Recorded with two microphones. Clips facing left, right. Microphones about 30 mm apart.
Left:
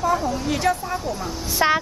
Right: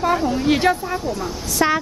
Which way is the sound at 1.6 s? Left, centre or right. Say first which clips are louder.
Right 1 dB; centre.